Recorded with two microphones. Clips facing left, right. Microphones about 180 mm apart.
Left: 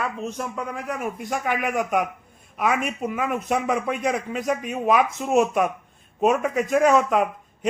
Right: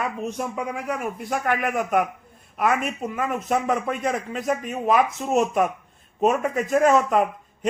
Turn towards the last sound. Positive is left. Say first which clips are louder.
# even
turn(degrees=0)  # may be behind; listen again after turning